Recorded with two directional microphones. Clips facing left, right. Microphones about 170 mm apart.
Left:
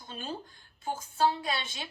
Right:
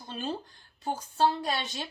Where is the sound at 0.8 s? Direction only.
40° right (ahead or behind).